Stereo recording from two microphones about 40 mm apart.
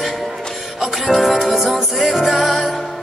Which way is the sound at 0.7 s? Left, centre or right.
Centre.